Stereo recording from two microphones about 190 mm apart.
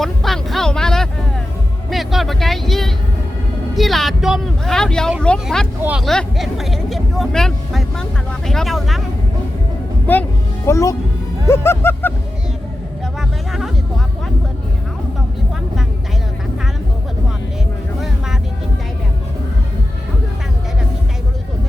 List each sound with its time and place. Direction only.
0.0 s music: centre (ahead or behind)
3.8 s speech: centre (ahead or behind)
10.1 s a sound: 10° left (ahead or behind)
13.1 s speech: centre (ahead or behind)